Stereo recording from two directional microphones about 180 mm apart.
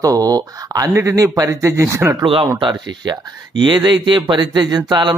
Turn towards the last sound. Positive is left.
turn(degrees=-25)  # may be behind; listen again after turning